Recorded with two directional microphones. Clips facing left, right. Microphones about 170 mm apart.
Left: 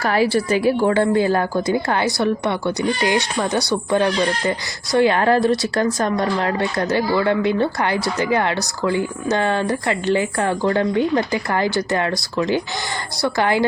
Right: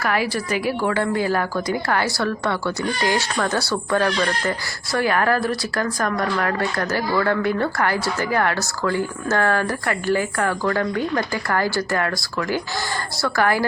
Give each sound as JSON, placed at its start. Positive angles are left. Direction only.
{"t": 0.0, "sound": "a woman's voice", "side_deg": 30}